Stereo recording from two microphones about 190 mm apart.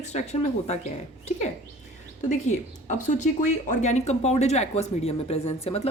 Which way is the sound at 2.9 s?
40° left (ahead or behind).